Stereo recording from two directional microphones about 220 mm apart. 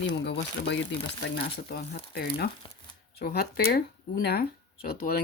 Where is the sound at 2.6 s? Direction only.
20° left (ahead or behind).